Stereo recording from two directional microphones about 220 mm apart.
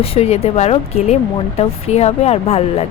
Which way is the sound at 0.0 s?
25° left (ahead or behind).